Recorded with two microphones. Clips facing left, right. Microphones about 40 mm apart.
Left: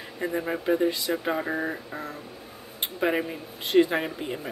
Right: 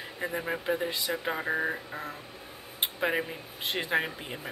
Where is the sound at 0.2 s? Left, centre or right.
Centre.